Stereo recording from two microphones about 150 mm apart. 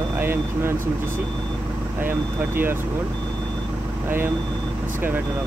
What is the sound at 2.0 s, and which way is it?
Speech, 15° right (ahead or behind).